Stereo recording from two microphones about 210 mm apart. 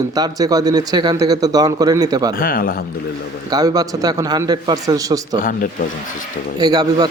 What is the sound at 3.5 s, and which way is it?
A man's voice, 20° right (ahead or behind).